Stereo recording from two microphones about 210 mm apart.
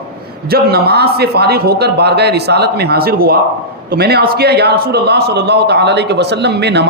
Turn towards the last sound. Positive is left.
turn(degrees=-55)  # may be behind; listen again after turning